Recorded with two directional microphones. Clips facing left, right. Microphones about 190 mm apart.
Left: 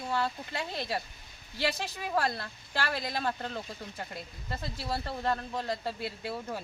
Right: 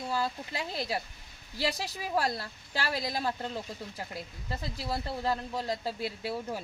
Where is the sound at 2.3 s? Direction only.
35° right (ahead or behind).